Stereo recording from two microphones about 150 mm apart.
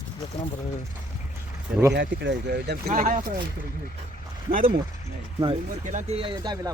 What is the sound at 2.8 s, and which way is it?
Speech, 50° right (ahead or behind).